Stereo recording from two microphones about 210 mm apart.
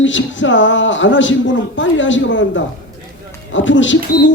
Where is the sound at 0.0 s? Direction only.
60° left (ahead or behind).